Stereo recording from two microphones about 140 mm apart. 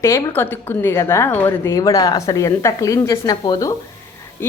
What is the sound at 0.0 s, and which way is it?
A woman's voice, 20° left (ahead or behind).